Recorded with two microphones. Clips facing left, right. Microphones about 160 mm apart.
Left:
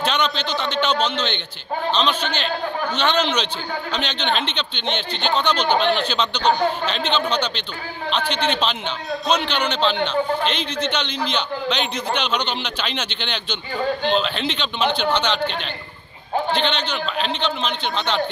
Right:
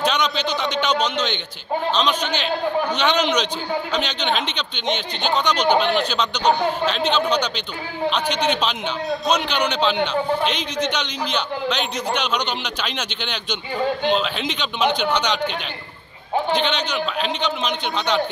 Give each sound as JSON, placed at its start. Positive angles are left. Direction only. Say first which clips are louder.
{"t": 0.0, "sound": "a man's voice", "louder": "right 1 dB", "side_deg": -10}